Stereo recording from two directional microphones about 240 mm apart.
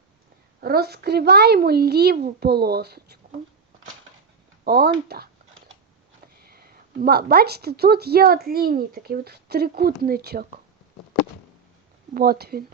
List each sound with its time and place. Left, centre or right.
0.6 s speech: right
4.6 s a sound: right
6.4 s speech: right
12.1 s speech: right